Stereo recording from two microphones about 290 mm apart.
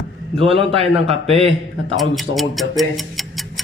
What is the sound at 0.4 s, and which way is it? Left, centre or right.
A man's voice, centre.